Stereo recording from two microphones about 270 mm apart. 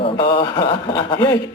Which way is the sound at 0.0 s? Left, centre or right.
Centre.